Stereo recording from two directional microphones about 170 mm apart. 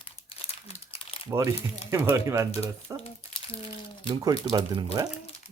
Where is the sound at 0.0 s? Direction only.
35° left (ahead or behind).